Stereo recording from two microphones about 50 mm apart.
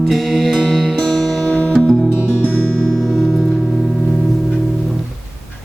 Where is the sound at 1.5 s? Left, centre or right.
Left.